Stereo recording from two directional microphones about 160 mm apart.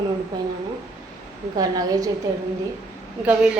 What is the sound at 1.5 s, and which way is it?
Speech, 25° right (ahead or behind).